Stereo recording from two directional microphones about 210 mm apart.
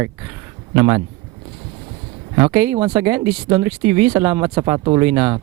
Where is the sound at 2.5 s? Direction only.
10° right (ahead or behind).